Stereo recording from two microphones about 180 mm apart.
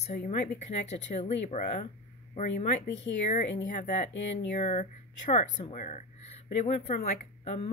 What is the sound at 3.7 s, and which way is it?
Speech, 45° left (ahead or behind).